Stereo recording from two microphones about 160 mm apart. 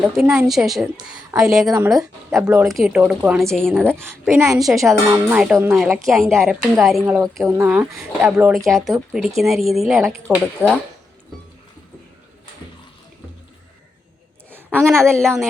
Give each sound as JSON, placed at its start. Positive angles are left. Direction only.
{"t": 0.0, "sound": "speech", "side_deg": -5}
{"t": 3.5, "sound": "speech", "side_deg": 5}
{"t": 3.8, "sound": "speech", "side_deg": -15}
{"t": 4.5, "sound": "speech", "side_deg": 0}
{"t": 8.5, "sound": "speech", "side_deg": 0}
{"t": 10.6, "sound": "speech", "side_deg": -10}
{"t": 14.5, "sound": "a woman's voice", "side_deg": -15}
{"t": 15.1, "sound": "speech", "side_deg": 5}